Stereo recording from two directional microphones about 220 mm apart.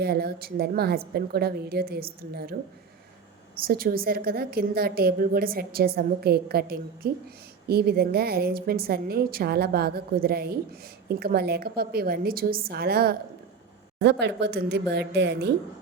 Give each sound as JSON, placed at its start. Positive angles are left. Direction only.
{"t": 0.0, "sound": "a woman's voice", "side_deg": -45}
{"t": 3.7, "sound": "a woman's voice", "side_deg": -40}